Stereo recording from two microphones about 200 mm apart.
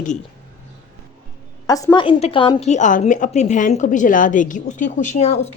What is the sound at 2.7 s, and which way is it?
A woman's voice, 35° left (ahead or behind).